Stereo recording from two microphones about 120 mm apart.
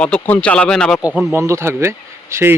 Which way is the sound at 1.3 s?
25° right (ahead or behind).